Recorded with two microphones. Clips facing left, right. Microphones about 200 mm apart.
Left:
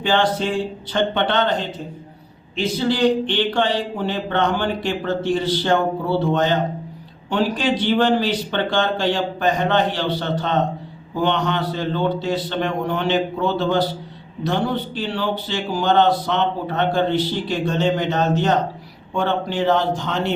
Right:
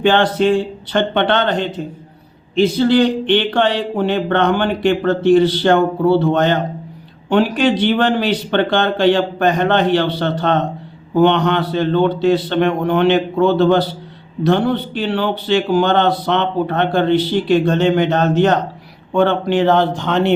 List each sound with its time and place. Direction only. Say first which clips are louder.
0.0 s speech: right 6 dB; 65° right (ahead or behind)
2.6 s speech: right 7 dB; 65° right (ahead or behind)